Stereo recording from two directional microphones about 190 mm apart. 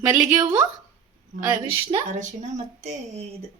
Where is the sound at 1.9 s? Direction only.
25° right (ahead or behind).